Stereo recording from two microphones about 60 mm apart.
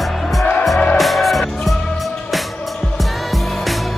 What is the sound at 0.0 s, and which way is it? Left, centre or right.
Music, centre.